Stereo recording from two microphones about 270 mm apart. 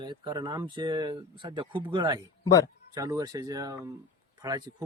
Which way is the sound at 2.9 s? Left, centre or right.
Centre.